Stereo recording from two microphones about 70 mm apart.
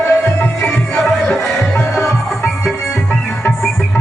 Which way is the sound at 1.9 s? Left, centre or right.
Left.